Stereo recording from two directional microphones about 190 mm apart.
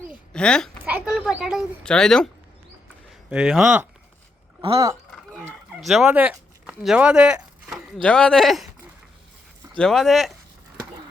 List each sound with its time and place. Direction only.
0.3 s a child's voice: 5° left (ahead or behind)
0.9 s a woman's voice: 5° right (ahead or behind)
5.1 s fowl: centre (ahead or behind)
5.8 s speech: centre (ahead or behind)
9.7 s speech: 5° left (ahead or behind)